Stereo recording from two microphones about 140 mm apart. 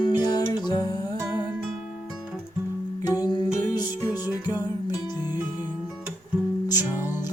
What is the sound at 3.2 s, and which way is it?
Music, 30° left (ahead or behind).